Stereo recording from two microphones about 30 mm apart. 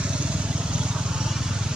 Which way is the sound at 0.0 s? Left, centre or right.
Right.